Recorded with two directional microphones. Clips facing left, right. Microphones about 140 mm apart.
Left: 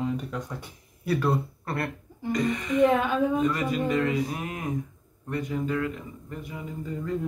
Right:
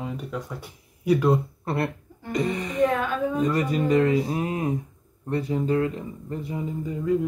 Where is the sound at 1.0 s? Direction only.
15° right (ahead or behind).